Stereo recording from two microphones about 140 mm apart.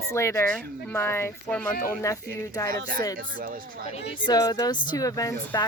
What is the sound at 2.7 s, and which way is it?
Speech, 85° right.